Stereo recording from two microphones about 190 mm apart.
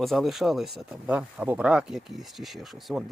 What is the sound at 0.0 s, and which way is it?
Speech, centre (ahead or behind).